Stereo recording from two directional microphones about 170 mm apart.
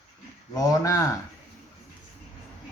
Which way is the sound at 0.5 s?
20° left (ahead or behind).